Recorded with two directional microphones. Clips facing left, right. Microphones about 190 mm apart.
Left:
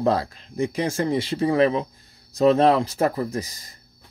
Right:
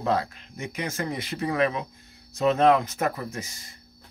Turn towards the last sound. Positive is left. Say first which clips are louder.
# left 8 dB
turn(degrees=35)  # may be behind; listen again after turning